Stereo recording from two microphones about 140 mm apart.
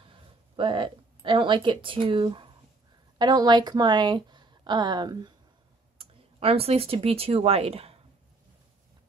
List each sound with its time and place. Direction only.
0.1 s a sound: 35° right (ahead or behind)
3.2 s speech: 30° right (ahead or behind)
5.9 s speech: 45° right (ahead or behind)